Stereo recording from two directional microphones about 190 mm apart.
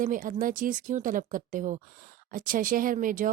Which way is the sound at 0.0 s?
45° right (ahead or behind).